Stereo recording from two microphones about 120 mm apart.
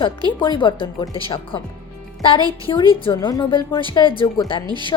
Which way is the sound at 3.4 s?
40° left (ahead or behind).